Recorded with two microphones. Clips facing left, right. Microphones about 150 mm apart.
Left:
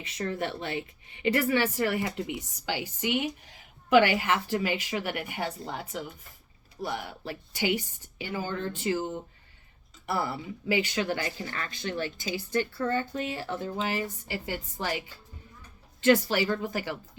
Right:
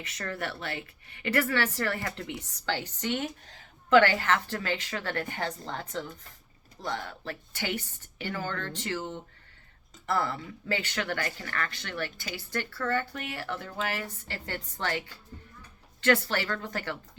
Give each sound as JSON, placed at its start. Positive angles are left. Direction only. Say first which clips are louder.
{"t": 0.0, "sound": "speech", "louder": "left 4 dB", "side_deg": 20}